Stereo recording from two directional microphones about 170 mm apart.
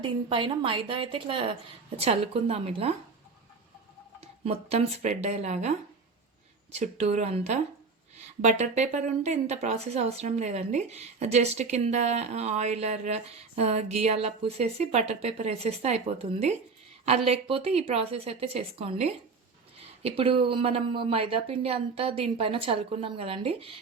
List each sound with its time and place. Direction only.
0.0 s a woman's voice: 30° right (ahead or behind)
4.2 s a woman's voice: 35° right (ahead or behind)